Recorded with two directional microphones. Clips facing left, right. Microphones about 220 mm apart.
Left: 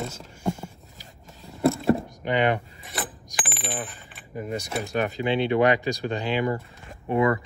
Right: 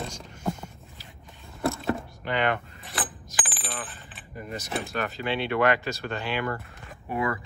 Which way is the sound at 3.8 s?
Centre (ahead or behind).